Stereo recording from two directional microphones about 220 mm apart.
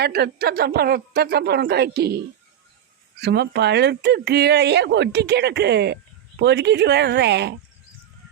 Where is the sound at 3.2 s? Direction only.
50° right (ahead or behind).